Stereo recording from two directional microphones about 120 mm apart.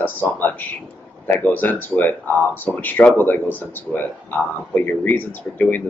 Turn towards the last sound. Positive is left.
turn(degrees=15)  # may be behind; listen again after turning